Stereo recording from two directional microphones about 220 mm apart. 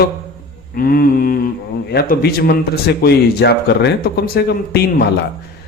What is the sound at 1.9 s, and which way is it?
A man's voice, 45° left (ahead or behind).